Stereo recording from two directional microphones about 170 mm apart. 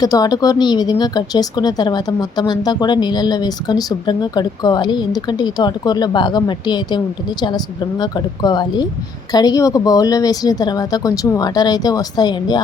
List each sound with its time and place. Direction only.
0.0 s speech: 20° left (ahead or behind)